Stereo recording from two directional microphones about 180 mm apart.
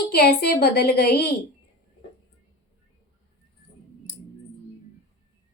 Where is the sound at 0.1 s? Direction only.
60° left (ahead or behind).